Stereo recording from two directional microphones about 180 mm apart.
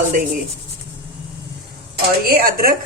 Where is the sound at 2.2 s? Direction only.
55° right (ahead or behind).